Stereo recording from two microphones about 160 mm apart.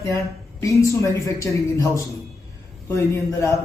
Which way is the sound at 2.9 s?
15° left (ahead or behind).